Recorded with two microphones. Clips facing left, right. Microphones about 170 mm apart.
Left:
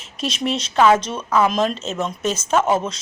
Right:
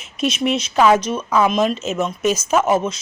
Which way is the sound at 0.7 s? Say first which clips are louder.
Even; 10° right (ahead or behind).